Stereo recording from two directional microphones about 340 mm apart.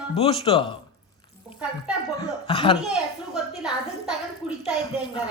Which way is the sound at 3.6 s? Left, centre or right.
Centre.